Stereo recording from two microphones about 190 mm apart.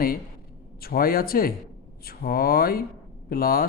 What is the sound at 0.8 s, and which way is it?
A man's voice, 50° left (ahead or behind).